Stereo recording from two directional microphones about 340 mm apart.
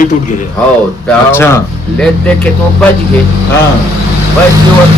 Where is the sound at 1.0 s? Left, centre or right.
Centre.